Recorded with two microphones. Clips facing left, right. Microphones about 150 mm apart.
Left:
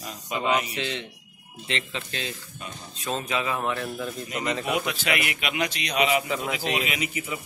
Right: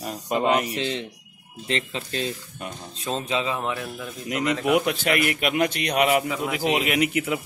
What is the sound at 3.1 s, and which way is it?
Speech, 25° right (ahead or behind).